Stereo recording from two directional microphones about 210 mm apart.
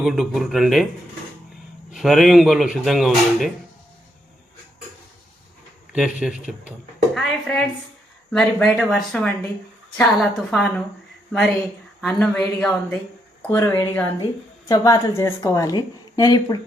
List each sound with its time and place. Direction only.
0.0 s speech: centre (ahead or behind)
1.9 s speech: centre (ahead or behind)
5.9 s a woman's voice: 5° right (ahead or behind); by 16.6 s 15° left (ahead or behind)